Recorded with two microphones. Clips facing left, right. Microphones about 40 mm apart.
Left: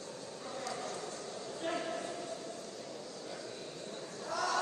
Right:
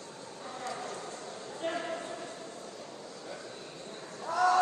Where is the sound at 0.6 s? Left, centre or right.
Right.